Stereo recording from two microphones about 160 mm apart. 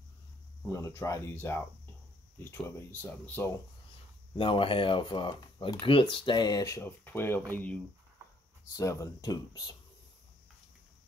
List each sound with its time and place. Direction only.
0.7 s speech: 20° left (ahead or behind)
4.4 s speech: 35° left (ahead or behind); by 7.8 s 10° left (ahead or behind)
8.7 s speech: 20° left (ahead or behind)